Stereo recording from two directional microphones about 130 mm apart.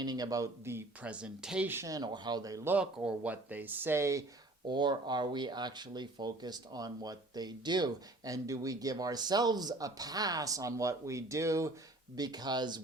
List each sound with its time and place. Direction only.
0.0 s speech: 30° right (ahead or behind)
2.7 s speech: 10° right (ahead or behind)
4.7 s speech: 35° right (ahead or behind)